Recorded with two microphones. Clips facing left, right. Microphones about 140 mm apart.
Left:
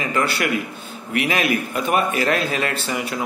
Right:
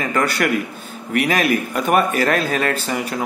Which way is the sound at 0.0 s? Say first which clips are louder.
Right 2 dB; 45° right (ahead or behind).